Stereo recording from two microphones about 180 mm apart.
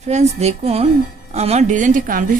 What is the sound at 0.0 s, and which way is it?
A woman's voice, 40° right (ahead or behind).